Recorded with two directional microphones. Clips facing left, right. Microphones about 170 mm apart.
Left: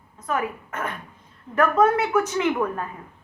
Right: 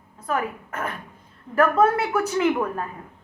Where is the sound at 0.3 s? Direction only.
35° right (ahead or behind).